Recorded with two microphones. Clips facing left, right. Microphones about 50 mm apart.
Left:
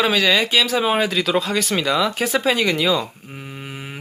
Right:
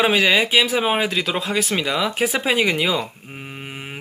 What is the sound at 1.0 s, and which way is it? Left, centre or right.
Speech, centre.